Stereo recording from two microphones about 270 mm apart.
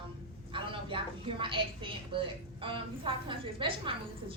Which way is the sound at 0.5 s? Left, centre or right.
Centre.